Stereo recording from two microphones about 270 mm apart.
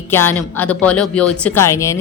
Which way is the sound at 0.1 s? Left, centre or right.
Centre.